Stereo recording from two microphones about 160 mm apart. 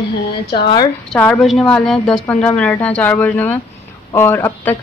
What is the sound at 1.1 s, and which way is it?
Speech, 10° left (ahead or behind).